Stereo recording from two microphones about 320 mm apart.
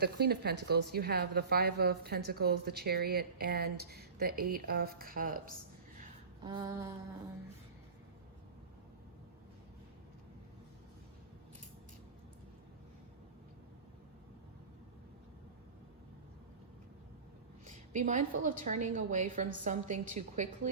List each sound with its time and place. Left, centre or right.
0.0 s a woman's voice: right
6.4 s a sound: centre
17.7 s a woman's voice: right